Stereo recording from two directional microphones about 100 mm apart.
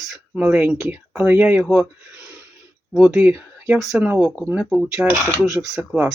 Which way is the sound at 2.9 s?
10° right (ahead or behind).